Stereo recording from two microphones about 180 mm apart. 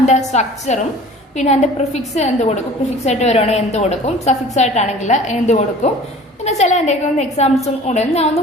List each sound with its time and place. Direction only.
0.0 s a woman's voice: 40° left (ahead or behind)